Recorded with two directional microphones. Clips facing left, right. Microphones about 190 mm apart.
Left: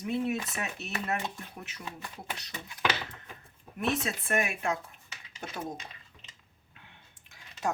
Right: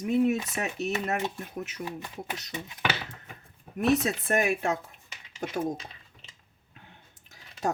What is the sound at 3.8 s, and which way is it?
Speech, 40° right (ahead or behind).